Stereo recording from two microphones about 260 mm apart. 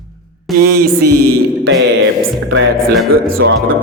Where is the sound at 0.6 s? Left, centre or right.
Right.